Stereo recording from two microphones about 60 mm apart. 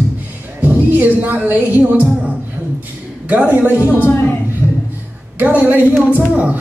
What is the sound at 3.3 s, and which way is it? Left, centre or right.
Speech, right.